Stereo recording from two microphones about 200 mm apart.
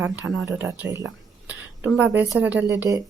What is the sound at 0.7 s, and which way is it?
Speech, 15° right (ahead or behind).